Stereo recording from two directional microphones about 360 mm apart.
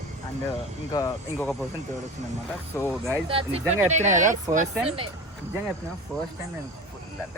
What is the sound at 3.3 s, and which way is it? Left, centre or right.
Speech, centre.